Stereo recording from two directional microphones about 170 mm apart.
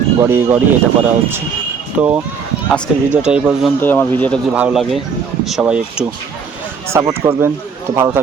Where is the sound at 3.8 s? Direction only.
10° left (ahead or behind).